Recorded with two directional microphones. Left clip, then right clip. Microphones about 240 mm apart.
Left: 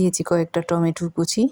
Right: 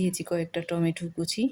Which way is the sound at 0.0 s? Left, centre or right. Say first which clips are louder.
Left 9 dB; centre.